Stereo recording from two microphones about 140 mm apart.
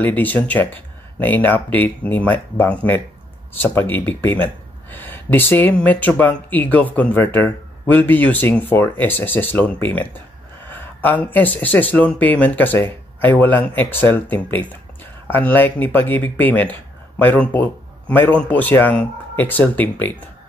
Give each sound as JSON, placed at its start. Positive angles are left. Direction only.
{"t": 0.0, "sound": "speech", "side_deg": 10}
{"t": 10.7, "sound": "a sound", "side_deg": 15}
{"t": 11.3, "sound": "speech", "side_deg": 10}